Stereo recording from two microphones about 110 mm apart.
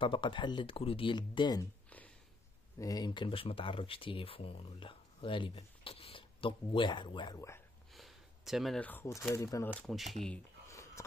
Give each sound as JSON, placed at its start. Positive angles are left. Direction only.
{"t": 0.0, "sound": "speech", "side_deg": 50}
{"t": 1.9, "sound": "a sound", "side_deg": 15}
{"t": 2.8, "sound": "speech", "side_deg": 35}
{"t": 5.6, "sound": "speech", "side_deg": 60}
{"t": 7.3, "sound": "speech", "side_deg": 25}
{"t": 7.9, "sound": "a sound", "side_deg": 0}
{"t": 8.7, "sound": "speech", "side_deg": 15}
{"t": 9.3, "sound": "speech", "side_deg": 25}
{"t": 10.1, "sound": "speech", "side_deg": 5}
{"t": 10.7, "sound": "a sound", "side_deg": 25}